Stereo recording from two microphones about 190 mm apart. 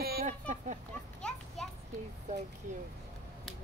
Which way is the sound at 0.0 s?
55° right (ahead or behind).